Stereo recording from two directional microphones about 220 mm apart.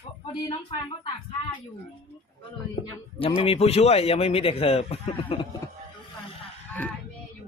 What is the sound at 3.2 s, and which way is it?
A man's voice, 25° left (ahead or behind).